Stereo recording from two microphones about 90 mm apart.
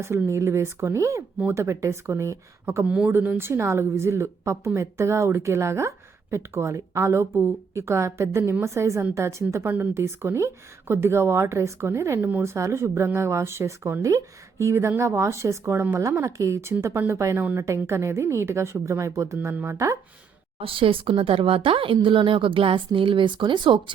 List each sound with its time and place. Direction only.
0.3 s speech: 30° right (ahead or behind)
2.8 s speech: 15° right (ahead or behind)
3.1 s a woman's voice: 25° right (ahead or behind)
20.6 s a woman's voice: 90° right
22.0 s speech: 70° right (ahead or behind)